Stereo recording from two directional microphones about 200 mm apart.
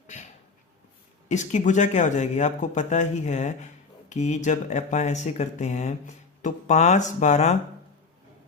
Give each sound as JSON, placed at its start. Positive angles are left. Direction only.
{"t": 1.3, "sound": "speech", "side_deg": 35}